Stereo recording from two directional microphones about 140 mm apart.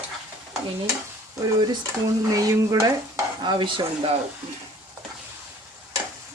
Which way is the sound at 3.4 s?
35° right (ahead or behind).